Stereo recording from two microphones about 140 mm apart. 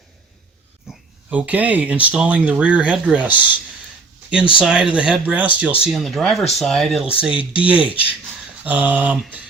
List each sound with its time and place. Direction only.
0.9 s speech: 10° right (ahead or behind)
7.3 s speech: 35° left (ahead or behind)
8.6 s speech: 10° right (ahead or behind)